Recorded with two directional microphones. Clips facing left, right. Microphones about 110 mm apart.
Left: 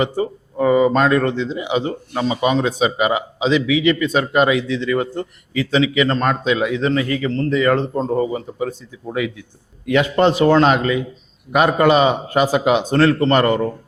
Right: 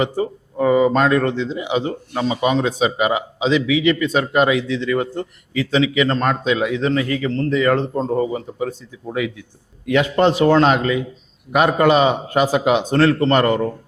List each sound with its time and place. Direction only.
0.0 s speech: 15° left (ahead or behind)
9.9 s speech: 10° left (ahead or behind)